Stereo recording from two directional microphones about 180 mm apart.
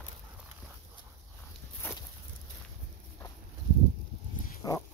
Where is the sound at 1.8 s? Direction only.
10° left (ahead or behind).